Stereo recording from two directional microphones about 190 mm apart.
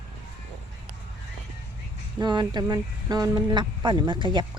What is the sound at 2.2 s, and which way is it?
Speech, 20° right (ahead or behind).